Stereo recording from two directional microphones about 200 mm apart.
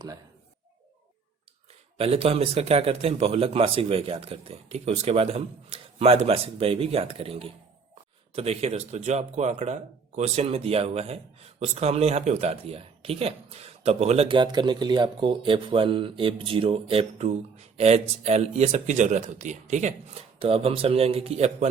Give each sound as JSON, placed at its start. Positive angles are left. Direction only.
{"t": 2.0, "sound": "speech", "side_deg": -30}